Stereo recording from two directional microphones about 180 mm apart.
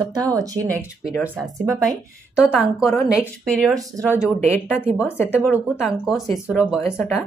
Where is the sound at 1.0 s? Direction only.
5° right (ahead or behind).